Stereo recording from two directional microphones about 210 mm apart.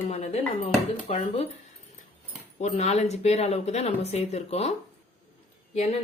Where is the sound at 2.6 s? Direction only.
30° left (ahead or behind).